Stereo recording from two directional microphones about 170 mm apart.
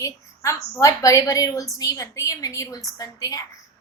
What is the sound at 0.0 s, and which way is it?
A woman's voice, 15° left (ahead or behind).